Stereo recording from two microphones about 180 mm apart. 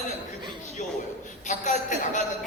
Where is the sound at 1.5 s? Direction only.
45° left (ahead or behind).